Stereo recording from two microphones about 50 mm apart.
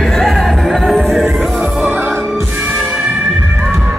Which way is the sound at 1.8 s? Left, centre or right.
Right.